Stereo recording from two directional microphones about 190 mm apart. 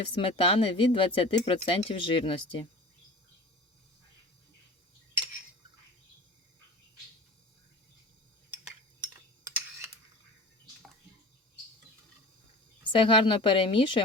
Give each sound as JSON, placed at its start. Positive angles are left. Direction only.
{"t": 0.2, "sound": "speech", "side_deg": 30}
{"t": 9.5, "sound": "camera", "side_deg": -10}
{"t": 12.9, "sound": "speech", "side_deg": 25}